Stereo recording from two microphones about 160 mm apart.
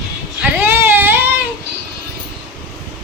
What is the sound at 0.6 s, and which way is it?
Baby cry, 15° right (ahead or behind).